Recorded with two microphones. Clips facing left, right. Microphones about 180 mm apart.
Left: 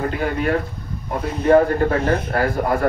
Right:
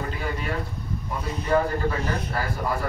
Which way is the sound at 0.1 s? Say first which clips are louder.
Left 9 dB; 60° left (ahead or behind).